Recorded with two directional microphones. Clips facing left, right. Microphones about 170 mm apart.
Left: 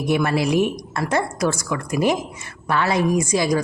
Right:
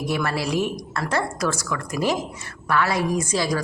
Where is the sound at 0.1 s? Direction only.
20° left (ahead or behind).